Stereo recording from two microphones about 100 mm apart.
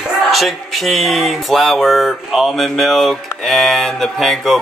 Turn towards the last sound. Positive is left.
turn(degrees=0)  # may be behind; listen again after turning